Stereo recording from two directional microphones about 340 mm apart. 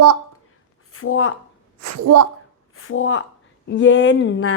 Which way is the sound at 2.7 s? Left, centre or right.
Left.